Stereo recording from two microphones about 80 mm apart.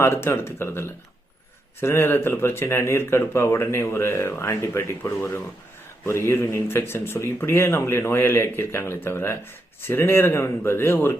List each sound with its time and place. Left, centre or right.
0.0 s a man's voice: left